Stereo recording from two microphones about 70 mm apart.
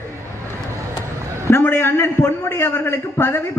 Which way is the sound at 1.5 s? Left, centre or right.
Left.